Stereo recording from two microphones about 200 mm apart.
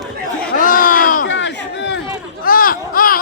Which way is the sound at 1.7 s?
65° left (ahead or behind).